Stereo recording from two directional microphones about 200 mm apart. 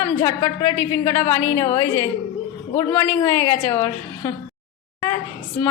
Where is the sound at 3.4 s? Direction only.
25° left (ahead or behind).